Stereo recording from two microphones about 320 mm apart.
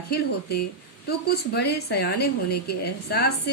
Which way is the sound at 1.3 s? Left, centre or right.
Left.